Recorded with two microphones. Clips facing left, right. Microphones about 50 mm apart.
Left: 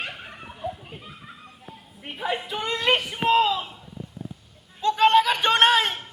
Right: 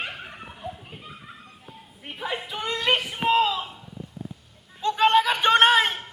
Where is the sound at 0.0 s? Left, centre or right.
Centre.